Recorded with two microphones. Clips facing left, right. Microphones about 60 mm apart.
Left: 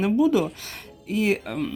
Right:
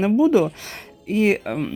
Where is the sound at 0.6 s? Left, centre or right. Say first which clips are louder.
Right 3 dB; right.